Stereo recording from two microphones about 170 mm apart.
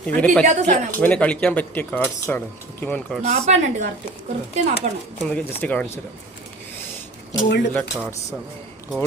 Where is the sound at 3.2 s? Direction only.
40° right (ahead or behind).